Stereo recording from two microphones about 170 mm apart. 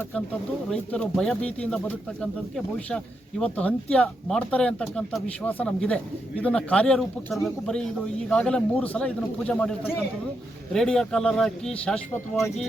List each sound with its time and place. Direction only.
0.7 s speech: 5° left (ahead or behind)
10.8 s speech: 5° left (ahead or behind)